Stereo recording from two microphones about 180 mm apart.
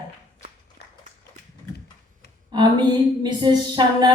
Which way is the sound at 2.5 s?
25° right (ahead or behind).